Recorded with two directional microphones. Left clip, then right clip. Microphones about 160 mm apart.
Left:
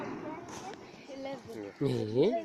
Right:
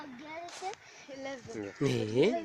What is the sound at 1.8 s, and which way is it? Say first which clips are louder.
Speech: even; 15° left (ahead or behind).